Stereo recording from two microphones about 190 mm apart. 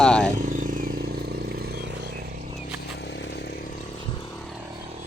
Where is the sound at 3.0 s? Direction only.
70° left (ahead or behind).